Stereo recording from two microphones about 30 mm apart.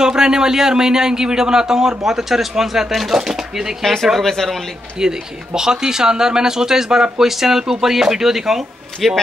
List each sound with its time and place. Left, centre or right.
0.0 s speech: right
3.8 s speech: centre
4.9 s speech: right
9.0 s speech: centre